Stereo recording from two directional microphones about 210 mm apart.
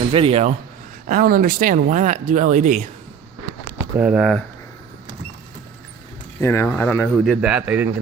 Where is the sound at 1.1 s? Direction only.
45° right (ahead or behind).